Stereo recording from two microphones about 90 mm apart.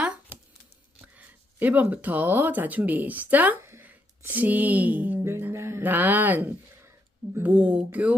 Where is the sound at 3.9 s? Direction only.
20° right (ahead or behind).